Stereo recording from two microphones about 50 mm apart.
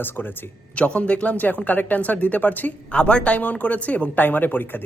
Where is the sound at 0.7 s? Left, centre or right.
Left.